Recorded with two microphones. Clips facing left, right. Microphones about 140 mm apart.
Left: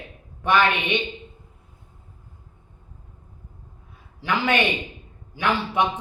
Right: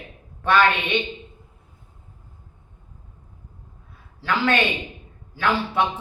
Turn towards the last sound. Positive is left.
turn(degrees=15)  # may be behind; listen again after turning